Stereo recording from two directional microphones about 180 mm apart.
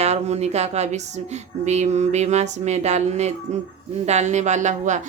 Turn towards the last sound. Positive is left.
turn(degrees=-40)  # may be behind; listen again after turning